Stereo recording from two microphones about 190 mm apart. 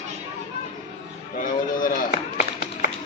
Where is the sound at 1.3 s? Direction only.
45° left (ahead or behind).